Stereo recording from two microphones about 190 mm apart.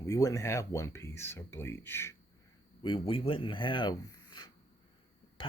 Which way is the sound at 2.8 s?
30° left (ahead or behind).